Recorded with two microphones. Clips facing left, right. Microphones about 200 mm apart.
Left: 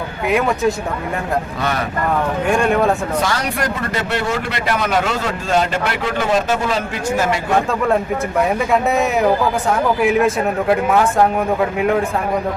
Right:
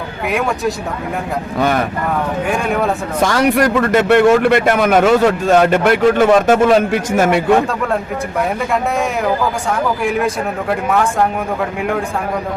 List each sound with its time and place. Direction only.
0.3 s speech: centre (ahead or behind)
2.5 s speech: centre (ahead or behind)
3.3 s speech: 60° right (ahead or behind)
8.4 s speech: centre (ahead or behind)